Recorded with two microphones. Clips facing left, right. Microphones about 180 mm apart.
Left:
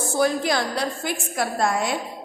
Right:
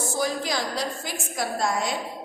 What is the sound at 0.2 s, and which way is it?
A woman's voice, 60° left (ahead or behind).